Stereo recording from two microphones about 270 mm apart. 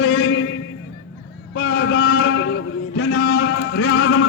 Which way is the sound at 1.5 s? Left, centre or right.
Left.